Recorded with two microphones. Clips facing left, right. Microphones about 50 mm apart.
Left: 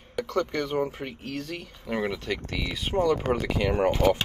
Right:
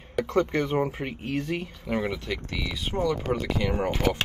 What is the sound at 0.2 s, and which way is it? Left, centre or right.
Speech, right.